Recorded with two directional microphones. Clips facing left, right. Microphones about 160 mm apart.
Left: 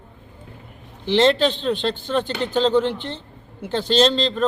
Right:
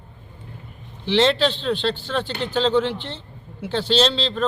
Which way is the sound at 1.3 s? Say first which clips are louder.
Left 2 dB; 50° left (ahead or behind).